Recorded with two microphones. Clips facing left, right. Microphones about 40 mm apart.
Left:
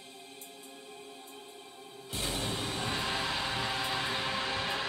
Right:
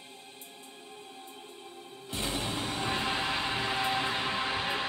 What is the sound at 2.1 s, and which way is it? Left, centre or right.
Music, centre.